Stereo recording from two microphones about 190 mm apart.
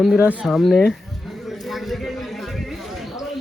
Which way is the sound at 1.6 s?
Centre (ahead or behind).